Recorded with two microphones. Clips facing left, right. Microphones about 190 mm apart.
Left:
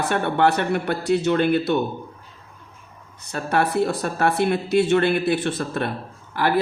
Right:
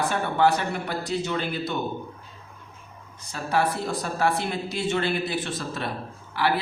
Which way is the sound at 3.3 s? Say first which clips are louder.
Left 3 dB; 60° left (ahead or behind).